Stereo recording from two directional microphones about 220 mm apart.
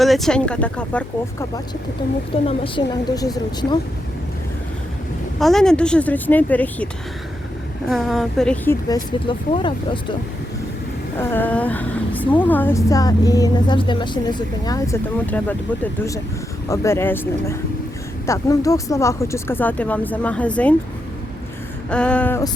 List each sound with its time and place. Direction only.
0.0 s a woman's voice: centre (ahead or behind)
2.5 s a woman's voice: 20° left (ahead or behind)
5.4 s a woman's voice: centre (ahead or behind)
7.9 s a woman's voice: centre (ahead or behind)
9.2 s a woman's voice: 20° left (ahead or behind)
11.2 s speech: 10° left (ahead or behind)
21.8 s speech: 5° left (ahead or behind)